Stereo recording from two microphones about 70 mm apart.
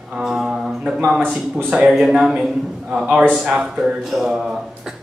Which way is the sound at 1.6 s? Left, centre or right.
Centre.